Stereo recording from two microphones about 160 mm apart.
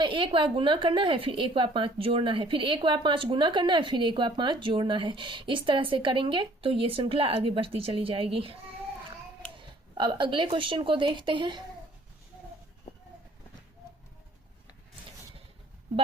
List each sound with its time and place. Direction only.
0.0 s a woman's voice: 30° right (ahead or behind)
9.6 s speech: 30° right (ahead or behind)